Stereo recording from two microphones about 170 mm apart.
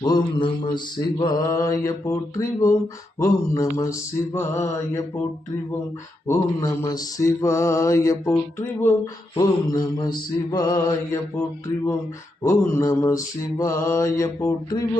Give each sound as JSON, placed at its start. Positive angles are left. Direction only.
{"t": 0.0, "sound": "mantra", "side_deg": 25}
{"t": 6.2, "sound": "mantra", "side_deg": 15}
{"t": 9.4, "sound": "mantra", "side_deg": 25}
{"t": 12.4, "sound": "mantra", "side_deg": 15}